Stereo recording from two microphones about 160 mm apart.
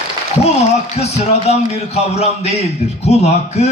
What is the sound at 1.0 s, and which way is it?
A man's voice, 40° left (ahead or behind).